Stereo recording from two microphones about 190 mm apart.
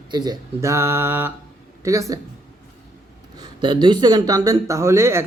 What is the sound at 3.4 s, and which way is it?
Speech, 25° right (ahead or behind).